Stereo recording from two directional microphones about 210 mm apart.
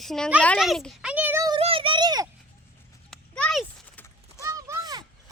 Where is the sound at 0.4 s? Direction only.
5° left (ahead or behind); by 1.5 s 10° right (ahead or behind).